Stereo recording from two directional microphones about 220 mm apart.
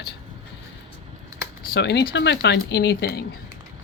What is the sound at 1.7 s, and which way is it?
Speech, 50° left (ahead or behind).